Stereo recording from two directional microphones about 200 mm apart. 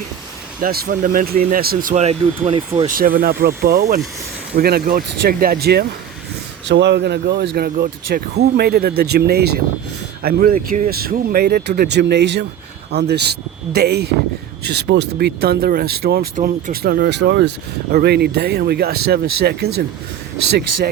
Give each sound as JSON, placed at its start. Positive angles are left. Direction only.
{"t": 0.6, "sound": "speech", "side_deg": -45}
{"t": 16.3, "sound": "speech", "side_deg": -40}